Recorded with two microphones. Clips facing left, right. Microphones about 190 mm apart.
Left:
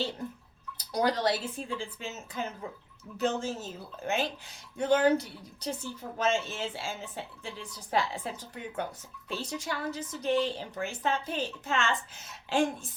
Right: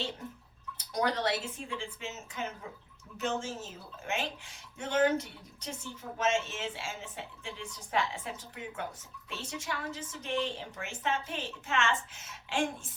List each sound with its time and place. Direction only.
0.8 s speech: 35° left (ahead or behind)